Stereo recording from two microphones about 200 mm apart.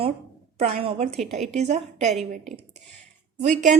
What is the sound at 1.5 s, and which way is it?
Speech, 35° right (ahead or behind).